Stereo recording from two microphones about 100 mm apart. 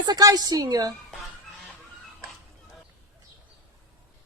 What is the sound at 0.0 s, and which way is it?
Speech, 40° right (ahead or behind).